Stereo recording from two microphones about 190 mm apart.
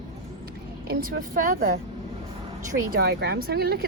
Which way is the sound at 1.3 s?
50° right (ahead or behind).